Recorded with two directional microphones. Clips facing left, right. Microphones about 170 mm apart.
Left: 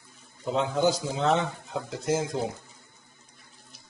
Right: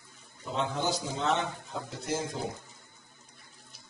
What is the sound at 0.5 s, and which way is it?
Speech, 90° left.